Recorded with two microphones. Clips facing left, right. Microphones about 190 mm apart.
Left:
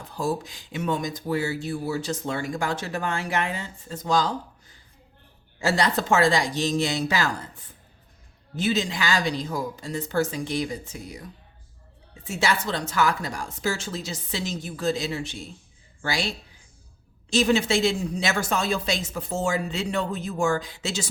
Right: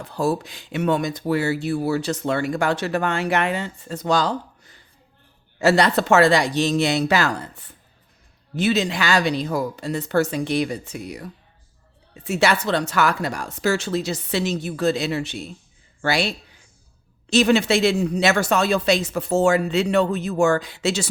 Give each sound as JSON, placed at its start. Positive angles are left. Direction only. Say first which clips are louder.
{"t": 0.0, "sound": "speech", "louder": "right 5 dB", "side_deg": -70}